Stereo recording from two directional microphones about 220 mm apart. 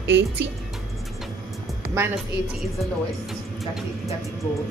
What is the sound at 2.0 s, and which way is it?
Speech, 15° right (ahead or behind).